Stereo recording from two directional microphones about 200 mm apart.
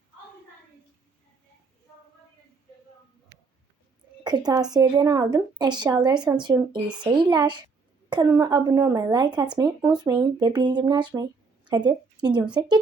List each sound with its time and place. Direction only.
4.2 s speech: 20° right (ahead or behind)